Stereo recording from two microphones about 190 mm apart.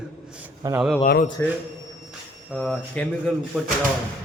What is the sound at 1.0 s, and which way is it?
Speech, 50° left (ahead or behind).